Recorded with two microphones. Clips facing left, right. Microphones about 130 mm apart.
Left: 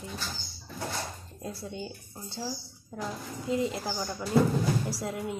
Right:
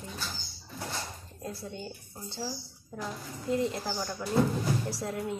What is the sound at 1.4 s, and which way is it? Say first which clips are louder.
Speech: left 1 dB; 5° left (ahead or behind).